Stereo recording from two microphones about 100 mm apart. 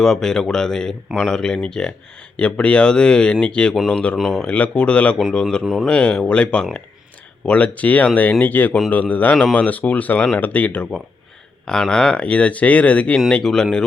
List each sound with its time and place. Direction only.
0.0 s speech: 5° left (ahead or behind)
4.2 s speech: centre (ahead or behind)
4.4 s speech: 10° left (ahead or behind)
5.6 s speech: centre (ahead or behind)
5.9 s speech: 10° left (ahead or behind)